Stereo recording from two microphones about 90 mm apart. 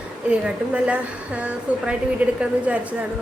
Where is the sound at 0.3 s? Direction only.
10° right (ahead or behind).